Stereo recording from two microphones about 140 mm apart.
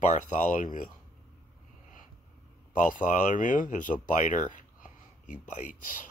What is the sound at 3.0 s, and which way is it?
Speech, 70° left (ahead or behind).